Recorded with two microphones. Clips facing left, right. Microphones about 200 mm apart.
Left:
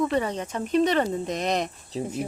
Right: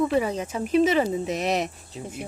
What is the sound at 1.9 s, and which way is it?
Speech, 35° left (ahead or behind).